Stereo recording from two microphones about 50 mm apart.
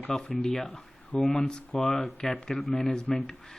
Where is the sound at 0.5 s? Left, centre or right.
Centre.